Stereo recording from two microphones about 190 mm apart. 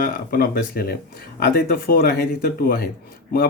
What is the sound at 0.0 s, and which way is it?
Speech, 50° left (ahead or behind).